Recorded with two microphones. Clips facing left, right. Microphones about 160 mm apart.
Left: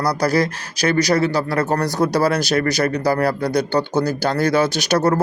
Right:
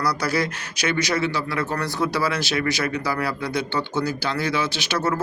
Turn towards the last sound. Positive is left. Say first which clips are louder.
# left 7 dB
turn(degrees=40)  # may be behind; listen again after turning